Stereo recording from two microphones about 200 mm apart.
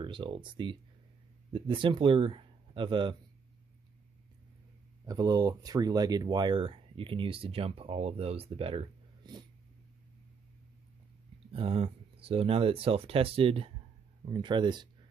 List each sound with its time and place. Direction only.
0.0 s speech: 25° right (ahead or behind)
5.0 s speech: 20° right (ahead or behind)
11.5 s speech: 25° right (ahead or behind)